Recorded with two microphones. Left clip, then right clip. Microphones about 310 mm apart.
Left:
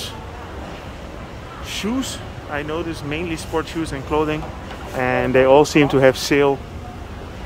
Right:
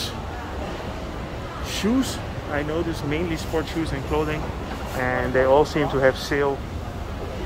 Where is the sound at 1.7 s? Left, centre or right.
Centre; by 6.5 s left.